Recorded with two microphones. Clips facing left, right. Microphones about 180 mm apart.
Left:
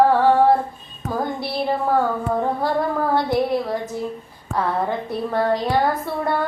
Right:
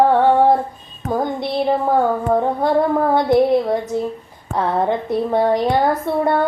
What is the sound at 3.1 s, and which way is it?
A woman's voice, 20° right (ahead or behind).